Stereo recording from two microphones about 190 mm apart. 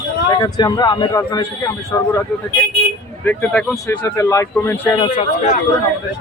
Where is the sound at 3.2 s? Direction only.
10° left (ahead or behind).